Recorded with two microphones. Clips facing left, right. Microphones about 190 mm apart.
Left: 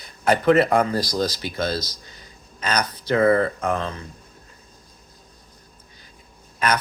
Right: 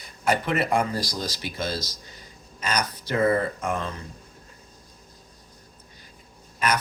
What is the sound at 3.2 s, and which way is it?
Speech, 65° left (ahead or behind).